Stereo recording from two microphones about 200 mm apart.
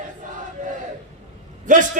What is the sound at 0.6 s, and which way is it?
Crowd, 40° right (ahead or behind).